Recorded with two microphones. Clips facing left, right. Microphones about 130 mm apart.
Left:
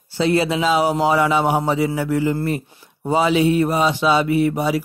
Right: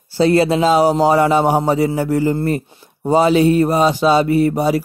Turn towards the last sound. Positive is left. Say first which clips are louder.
# right 3 dB
turn(degrees=-40)  # may be behind; listen again after turning